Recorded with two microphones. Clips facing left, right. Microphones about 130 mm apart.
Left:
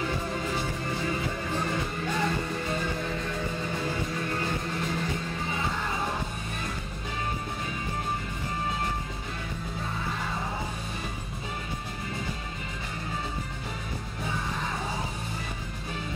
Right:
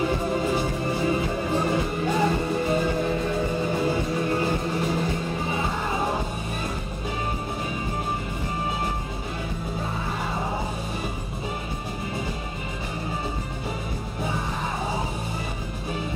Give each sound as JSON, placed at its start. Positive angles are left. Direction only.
{"t": 0.0, "sound": "music", "side_deg": -20}